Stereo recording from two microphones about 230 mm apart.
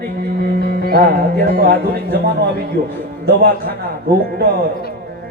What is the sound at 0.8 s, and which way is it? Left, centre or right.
Speech, right.